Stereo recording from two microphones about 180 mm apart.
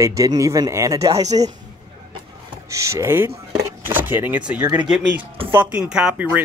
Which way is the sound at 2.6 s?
15° right (ahead or behind).